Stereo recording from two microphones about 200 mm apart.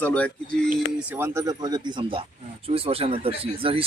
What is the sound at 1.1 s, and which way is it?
Speech, 10° right (ahead or behind).